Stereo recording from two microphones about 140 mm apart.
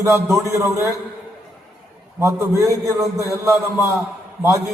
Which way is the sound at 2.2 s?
20° right (ahead or behind).